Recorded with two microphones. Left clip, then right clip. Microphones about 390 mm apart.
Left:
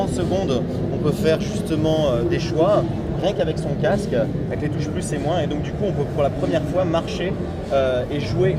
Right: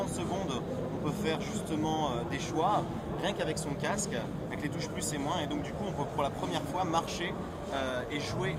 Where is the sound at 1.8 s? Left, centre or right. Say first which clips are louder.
Left 14 dB; centre.